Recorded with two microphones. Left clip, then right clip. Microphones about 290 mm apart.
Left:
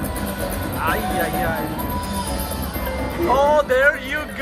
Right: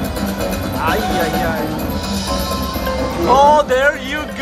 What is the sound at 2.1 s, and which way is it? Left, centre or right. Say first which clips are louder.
Music: right 6 dB; centre.